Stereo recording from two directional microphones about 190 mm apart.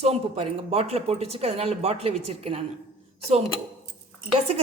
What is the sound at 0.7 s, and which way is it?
Speech, 30° right (ahead or behind).